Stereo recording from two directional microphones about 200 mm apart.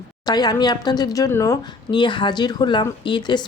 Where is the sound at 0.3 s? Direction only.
20° left (ahead or behind).